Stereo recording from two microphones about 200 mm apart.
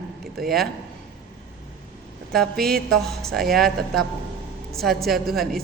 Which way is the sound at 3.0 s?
Centre (ahead or behind).